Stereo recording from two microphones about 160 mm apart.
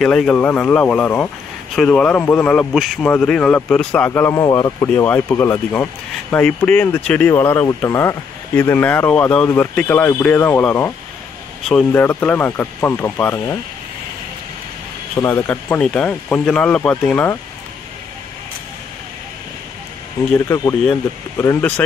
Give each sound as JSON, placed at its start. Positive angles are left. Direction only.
{"t": 0.0, "sound": "speech", "side_deg": 5}
{"t": 4.8, "sound": "speech", "side_deg": 10}
{"t": 11.9, "sound": "speech", "side_deg": 15}
{"t": 15.1, "sound": "speech", "side_deg": 15}
{"t": 20.3, "sound": "speech", "side_deg": 20}